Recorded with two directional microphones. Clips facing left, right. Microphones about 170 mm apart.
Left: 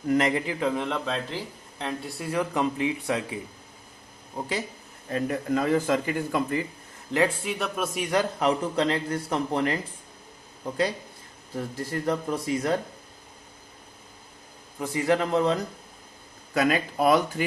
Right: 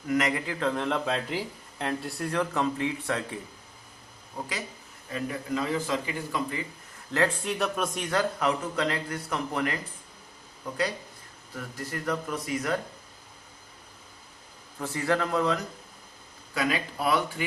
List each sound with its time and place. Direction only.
0.1 s a man's voice: 25° left (ahead or behind)
0.6 s speech: 5° left (ahead or behind)
5.0 s speech: 45° left (ahead or behind)
7.1 s a man's voice: 15° left (ahead or behind)
7.4 s a man's voice: centre (ahead or behind); by 9.7 s 30° left (ahead or behind)
11.5 s a man's voice: 30° left (ahead or behind)
14.8 s a man's voice: 15° left (ahead or behind)
16.6 s speech: 45° left (ahead or behind)